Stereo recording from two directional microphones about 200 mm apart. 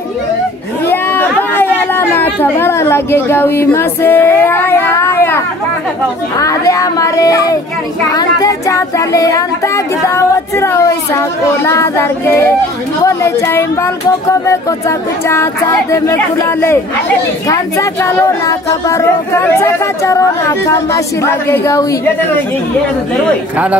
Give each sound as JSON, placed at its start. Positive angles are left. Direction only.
{"t": 0.8, "sound": "chatter", "side_deg": 10}
{"t": 6.3, "sound": "speech", "side_deg": 15}